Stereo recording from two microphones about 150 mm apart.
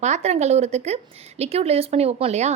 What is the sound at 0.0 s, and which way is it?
A woman's voice, 50° right (ahead or behind).